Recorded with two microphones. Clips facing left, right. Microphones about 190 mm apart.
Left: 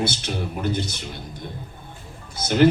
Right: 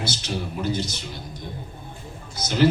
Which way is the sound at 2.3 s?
55° left (ahead or behind).